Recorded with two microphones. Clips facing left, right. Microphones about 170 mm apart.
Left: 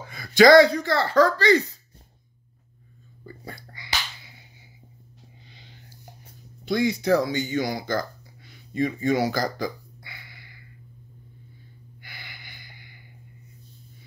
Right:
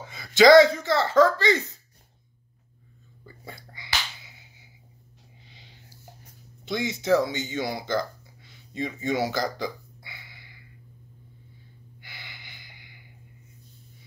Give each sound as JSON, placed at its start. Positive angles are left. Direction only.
{"t": 0.0, "sound": "speech", "side_deg": -20}
{"t": 3.4, "sound": "whispering", "side_deg": -25}
{"t": 6.6, "sound": "speech", "side_deg": -20}
{"t": 8.5, "sound": "hiccup", "side_deg": -25}
{"t": 12.0, "sound": "gasp", "side_deg": -25}